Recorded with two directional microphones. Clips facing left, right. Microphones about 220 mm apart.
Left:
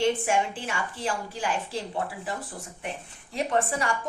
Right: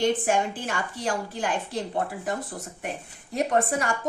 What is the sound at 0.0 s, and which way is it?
Speech, 40° right (ahead or behind).